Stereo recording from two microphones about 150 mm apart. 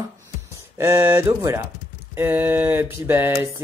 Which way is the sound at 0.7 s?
20° right (ahead or behind).